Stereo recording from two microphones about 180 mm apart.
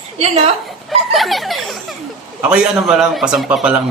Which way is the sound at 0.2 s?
35° right (ahead or behind).